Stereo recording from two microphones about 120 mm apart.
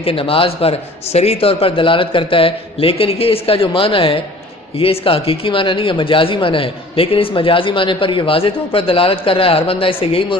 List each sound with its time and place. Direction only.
0.0 s speech: 50° left (ahead or behind)